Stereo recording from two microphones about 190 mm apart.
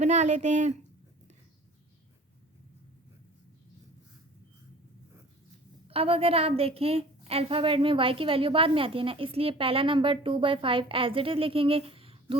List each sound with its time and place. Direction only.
0.0 s speech: 35° right (ahead or behind)
5.9 s a woman's voice: 30° right (ahead or behind)